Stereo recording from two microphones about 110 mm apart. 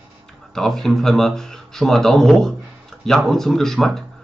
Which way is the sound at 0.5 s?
Centre (ahead or behind).